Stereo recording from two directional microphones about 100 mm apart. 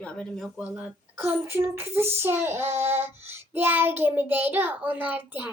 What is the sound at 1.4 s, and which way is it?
Female singing, 25° right (ahead or behind).